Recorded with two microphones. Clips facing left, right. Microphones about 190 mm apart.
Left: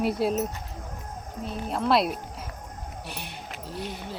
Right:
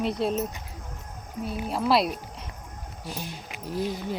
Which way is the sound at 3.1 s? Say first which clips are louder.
Right 7 dB; 65° left (ahead or behind).